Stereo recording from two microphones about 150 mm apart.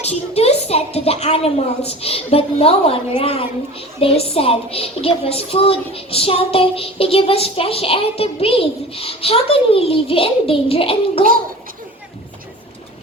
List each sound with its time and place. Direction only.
0.0 s a woman's voice: 45° left (ahead or behind)